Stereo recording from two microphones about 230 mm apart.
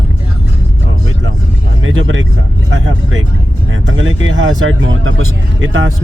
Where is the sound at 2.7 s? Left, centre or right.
Right.